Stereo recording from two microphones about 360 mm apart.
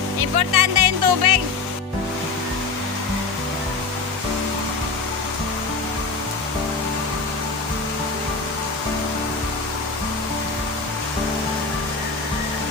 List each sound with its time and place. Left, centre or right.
0.2 s speech: right